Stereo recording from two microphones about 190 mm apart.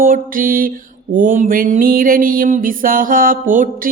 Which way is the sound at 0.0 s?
45° right (ahead or behind).